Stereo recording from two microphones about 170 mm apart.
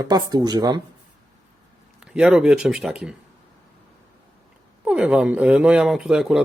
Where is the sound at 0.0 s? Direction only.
25° right (ahead or behind).